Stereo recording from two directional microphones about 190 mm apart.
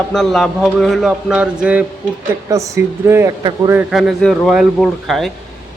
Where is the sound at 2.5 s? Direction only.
15° right (ahead or behind).